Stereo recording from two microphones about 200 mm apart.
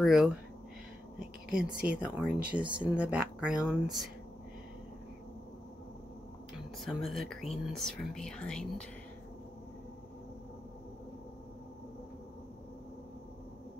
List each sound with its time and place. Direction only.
0.0 s speech: centre (ahead or behind)
1.7 s speech: 5° right (ahead or behind)
6.8 s speech: centre (ahead or behind)